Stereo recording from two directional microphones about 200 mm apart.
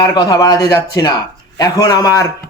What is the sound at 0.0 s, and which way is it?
A man's voice, 20° left (ahead or behind).